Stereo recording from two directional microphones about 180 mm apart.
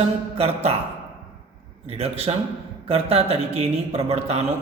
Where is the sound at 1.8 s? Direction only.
35° right (ahead or behind).